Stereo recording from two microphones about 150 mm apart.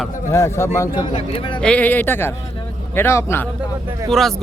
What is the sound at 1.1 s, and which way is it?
Speech, 40° left (ahead or behind).